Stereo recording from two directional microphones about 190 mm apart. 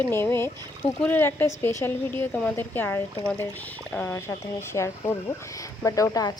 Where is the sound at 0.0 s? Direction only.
10° left (ahead or behind).